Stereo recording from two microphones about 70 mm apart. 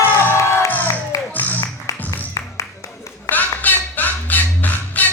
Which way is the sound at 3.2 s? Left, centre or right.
Left.